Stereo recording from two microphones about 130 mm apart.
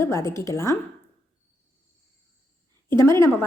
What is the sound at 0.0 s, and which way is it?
Speech, 20° left (ahead or behind).